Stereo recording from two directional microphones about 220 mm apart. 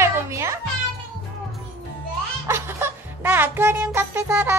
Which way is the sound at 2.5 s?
10° right (ahead or behind).